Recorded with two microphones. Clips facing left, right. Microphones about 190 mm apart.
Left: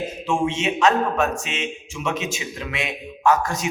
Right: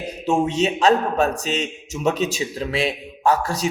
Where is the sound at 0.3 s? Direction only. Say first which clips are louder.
Right 3 dB; 40° right (ahead or behind).